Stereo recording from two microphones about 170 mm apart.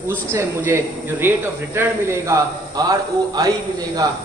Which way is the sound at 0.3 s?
15° right (ahead or behind).